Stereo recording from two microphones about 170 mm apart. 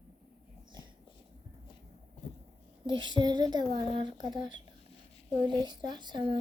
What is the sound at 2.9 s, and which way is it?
Child singing, 25° right (ahead or behind).